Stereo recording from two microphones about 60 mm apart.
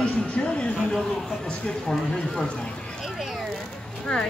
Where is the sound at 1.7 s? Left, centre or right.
Centre.